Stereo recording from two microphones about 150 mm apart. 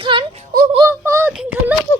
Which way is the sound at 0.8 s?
20° right (ahead or behind).